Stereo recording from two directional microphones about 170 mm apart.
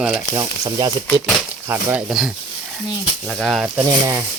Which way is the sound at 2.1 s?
5° right (ahead or behind).